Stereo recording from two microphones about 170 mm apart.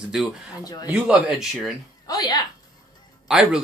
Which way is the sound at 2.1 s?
25° left (ahead or behind).